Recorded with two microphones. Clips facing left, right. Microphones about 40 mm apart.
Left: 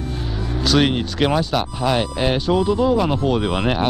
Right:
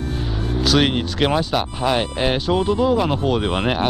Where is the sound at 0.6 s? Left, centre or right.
Centre.